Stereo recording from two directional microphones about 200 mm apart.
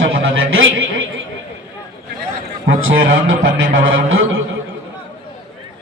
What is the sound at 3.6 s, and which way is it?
Speech, 80° right.